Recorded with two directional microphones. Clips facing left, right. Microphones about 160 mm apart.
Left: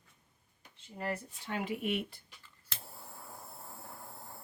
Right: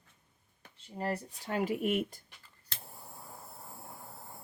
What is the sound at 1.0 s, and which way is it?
Speech, 35° right (ahead or behind).